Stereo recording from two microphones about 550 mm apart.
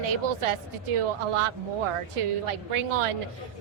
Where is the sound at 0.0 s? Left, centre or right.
Right.